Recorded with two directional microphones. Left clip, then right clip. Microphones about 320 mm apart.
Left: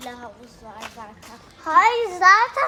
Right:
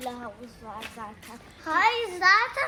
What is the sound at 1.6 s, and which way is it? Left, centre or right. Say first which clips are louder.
A child's voice: left 7 dB; left.